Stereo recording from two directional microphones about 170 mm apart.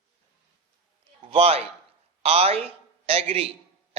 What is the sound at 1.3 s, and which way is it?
A woman's voice, 35° right (ahead or behind).